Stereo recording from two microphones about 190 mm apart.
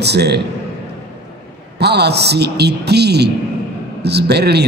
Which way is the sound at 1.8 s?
60° right (ahead or behind).